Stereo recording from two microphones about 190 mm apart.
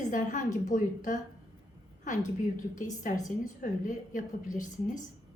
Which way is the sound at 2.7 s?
40° left (ahead or behind).